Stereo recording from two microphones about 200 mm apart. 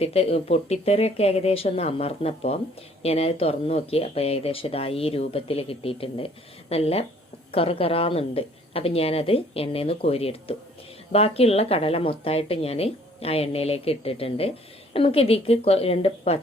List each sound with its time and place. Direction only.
0.0 s speech: 30° left (ahead or behind)